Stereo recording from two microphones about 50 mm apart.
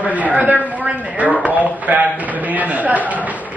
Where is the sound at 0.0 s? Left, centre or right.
Right.